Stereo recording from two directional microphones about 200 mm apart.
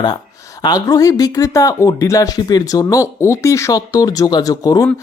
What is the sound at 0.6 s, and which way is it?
Speech, 20° left (ahead or behind).